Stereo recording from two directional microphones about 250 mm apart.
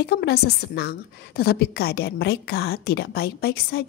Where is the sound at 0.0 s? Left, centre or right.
Left.